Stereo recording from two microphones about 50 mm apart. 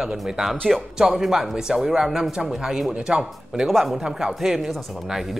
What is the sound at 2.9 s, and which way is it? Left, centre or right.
Speech, right.